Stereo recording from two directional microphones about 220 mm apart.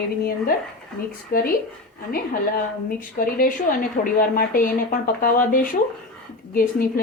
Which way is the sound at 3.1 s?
40° left (ahead or behind).